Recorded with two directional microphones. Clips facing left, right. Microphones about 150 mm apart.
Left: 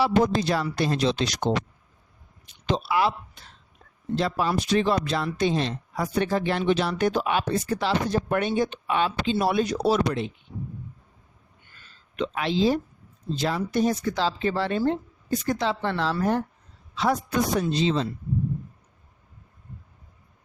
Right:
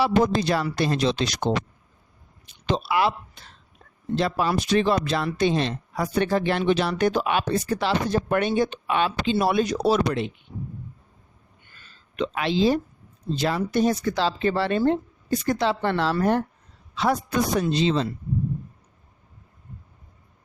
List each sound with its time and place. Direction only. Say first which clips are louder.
0.0 s speech: right 1 dB; 70° right (ahead or behind)
2.6 s speech: right 1 dB; 70° right (ahead or behind)
12.1 s speech: right 1 dB; 80° right
13.3 s speech: right 2 dB; 70° right (ahead or behind)
17.6 s speech: right 2 dB; 75° right (ahead or behind)